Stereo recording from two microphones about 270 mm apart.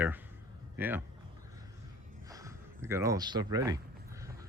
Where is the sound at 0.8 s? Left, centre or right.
Centre.